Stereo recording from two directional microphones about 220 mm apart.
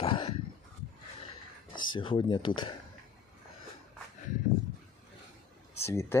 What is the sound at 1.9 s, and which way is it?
Speech, 20° left (ahead or behind).